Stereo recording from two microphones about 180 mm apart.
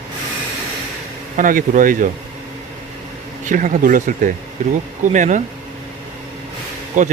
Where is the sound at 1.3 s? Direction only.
45° right (ahead or behind).